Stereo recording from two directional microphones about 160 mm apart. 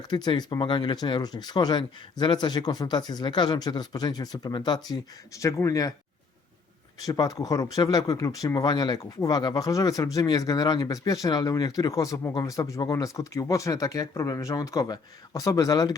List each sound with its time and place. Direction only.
0.1 s speech: 25° left (ahead or behind)
7.0 s speech: 20° left (ahead or behind)